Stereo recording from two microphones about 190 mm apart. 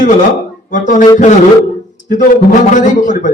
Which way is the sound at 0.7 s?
40° left (ahead or behind).